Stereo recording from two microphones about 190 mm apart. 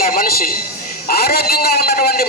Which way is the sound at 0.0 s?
50° left (ahead or behind).